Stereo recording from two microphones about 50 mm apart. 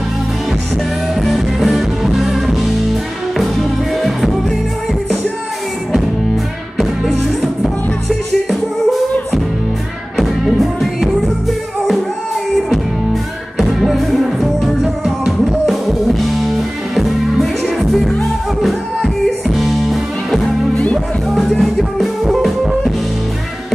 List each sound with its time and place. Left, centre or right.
1.2 s music: centre
4.0 s music: centre
6.8 s music: centre
10.1 s music: centre
13.6 s music: centre
19.4 s music: centre
20.7 s music: centre
21.4 s music: centre